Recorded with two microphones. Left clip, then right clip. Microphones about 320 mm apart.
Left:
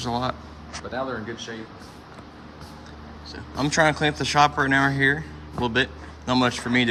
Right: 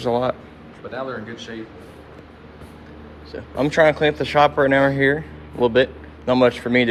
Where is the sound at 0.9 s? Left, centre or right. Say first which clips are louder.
Right 1 dB; left.